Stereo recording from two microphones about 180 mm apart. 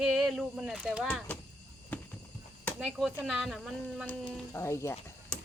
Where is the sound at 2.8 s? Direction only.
Centre (ahead or behind); by 5.0 s 15° left (ahead or behind).